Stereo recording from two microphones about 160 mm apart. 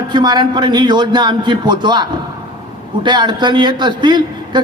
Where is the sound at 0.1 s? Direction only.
25° right (ahead or behind).